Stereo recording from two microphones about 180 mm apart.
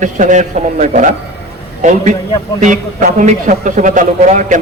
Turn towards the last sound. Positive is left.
turn(degrees=-45)  # may be behind; listen again after turning